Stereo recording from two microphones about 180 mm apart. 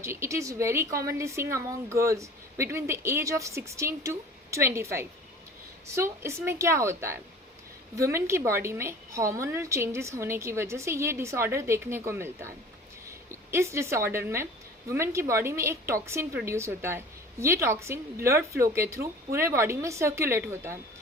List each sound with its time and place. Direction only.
0.0 s speech: 15° right (ahead or behind)